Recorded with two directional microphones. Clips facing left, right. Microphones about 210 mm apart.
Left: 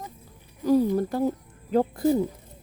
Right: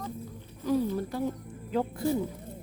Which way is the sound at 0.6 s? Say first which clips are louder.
Left 6 dB; 40° left (ahead or behind).